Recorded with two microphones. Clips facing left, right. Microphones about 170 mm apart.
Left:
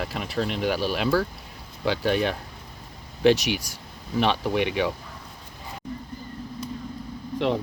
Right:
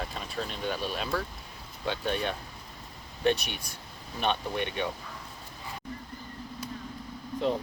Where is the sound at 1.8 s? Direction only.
90° left.